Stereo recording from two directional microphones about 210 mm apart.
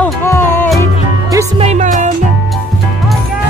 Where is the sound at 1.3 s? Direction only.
25° right (ahead or behind).